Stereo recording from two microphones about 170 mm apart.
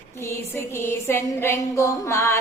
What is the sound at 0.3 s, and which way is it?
A woman's voice, 15° left (ahead or behind).